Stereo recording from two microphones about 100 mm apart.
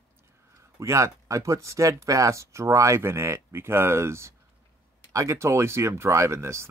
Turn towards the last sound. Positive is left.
turn(degrees=-25)  # may be behind; listen again after turning